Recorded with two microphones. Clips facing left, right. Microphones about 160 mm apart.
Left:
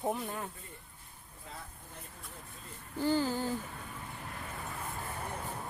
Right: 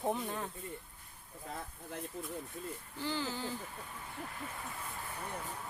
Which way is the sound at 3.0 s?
45° left (ahead or behind).